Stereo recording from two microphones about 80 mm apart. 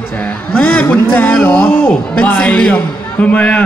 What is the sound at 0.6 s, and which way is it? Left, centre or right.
A man's voice, centre.